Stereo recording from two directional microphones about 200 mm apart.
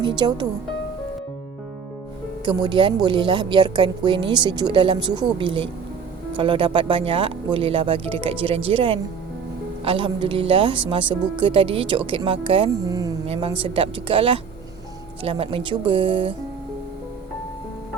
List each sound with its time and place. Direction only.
0.0 s speech: 20° right (ahead or behind)
2.4 s speech: 25° right (ahead or behind)
13.2 s speech: 30° right (ahead or behind)